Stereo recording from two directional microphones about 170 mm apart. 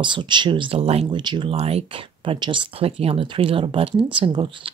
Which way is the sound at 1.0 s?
25° right (ahead or behind).